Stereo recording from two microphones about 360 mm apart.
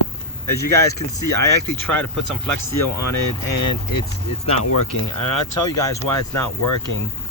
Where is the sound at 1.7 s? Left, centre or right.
Centre.